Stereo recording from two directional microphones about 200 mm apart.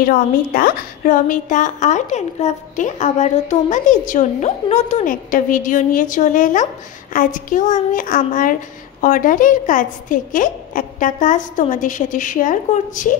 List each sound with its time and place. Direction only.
0.0 s a woman's voice: 45° left (ahead or behind)